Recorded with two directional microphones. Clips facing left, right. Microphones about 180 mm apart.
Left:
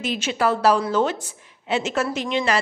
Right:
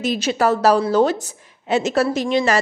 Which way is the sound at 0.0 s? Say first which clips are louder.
Right 4 dB; 40° right (ahead or behind).